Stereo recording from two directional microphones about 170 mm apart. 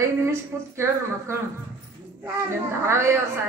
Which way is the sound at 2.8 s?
15° right (ahead or behind).